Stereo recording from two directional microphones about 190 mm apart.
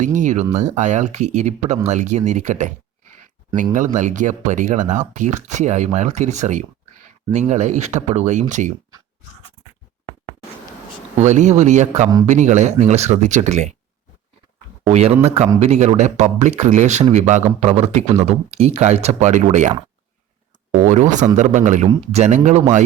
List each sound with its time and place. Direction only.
0.0 s speech: 40° right (ahead or behind)
3.9 s speech: 40° right (ahead or behind)
11.2 s speech: 35° right (ahead or behind)
14.8 s speech: 35° right (ahead or behind)
20.7 s speech: 40° right (ahead or behind)